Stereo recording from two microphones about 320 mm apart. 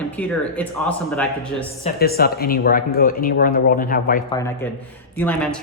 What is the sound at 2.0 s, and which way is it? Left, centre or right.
Speech, left.